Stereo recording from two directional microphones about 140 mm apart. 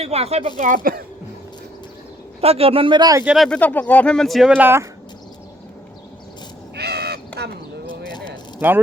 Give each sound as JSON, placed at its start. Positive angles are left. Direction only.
{"t": 0.0, "sound": "speech", "side_deg": -45}
{"t": 0.6, "sound": "speech", "side_deg": -75}
{"t": 2.4, "sound": "speech", "side_deg": -45}
{"t": 3.2, "sound": "speech", "side_deg": 0}
{"t": 4.5, "sound": "speech", "side_deg": -15}
{"t": 7.3, "sound": "a sound", "side_deg": 10}
{"t": 8.0, "sound": "a sound", "side_deg": 30}